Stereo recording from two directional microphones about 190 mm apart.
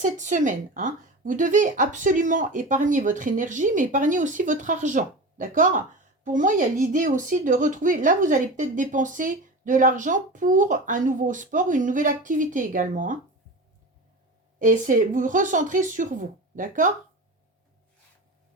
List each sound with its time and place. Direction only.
0.0 s speech: 40° right (ahead or behind)
14.6 s speech: 45° right (ahead or behind)